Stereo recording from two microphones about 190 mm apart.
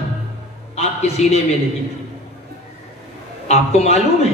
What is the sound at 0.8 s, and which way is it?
Speech, 35° left (ahead or behind).